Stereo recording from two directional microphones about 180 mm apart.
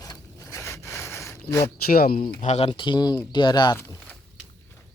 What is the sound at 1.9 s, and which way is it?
Speech, 60° left (ahead or behind).